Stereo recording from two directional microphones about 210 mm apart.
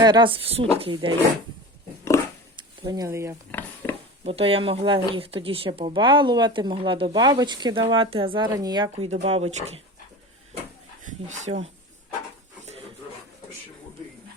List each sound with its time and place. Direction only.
0.0 s speech: 20° right (ahead or behind)
2.6 s speech: 20° right (ahead or behind)
3.5 s a sound: 5° left (ahead or behind)
4.2 s speech: 25° right (ahead or behind)
11.0 s speech: 35° right (ahead or behind)